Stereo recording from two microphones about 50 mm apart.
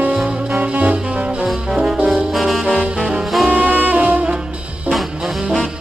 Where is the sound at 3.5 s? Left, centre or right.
Right.